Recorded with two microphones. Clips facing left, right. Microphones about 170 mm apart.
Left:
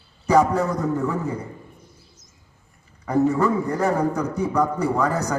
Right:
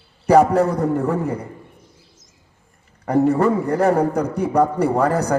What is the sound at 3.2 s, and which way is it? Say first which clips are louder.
A man's voice: right 3 dB; 60° right (ahead or behind).